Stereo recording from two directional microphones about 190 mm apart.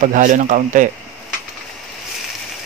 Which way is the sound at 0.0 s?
45° right (ahead or behind).